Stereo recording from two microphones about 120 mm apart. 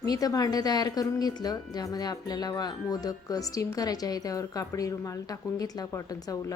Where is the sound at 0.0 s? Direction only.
30° left (ahead or behind).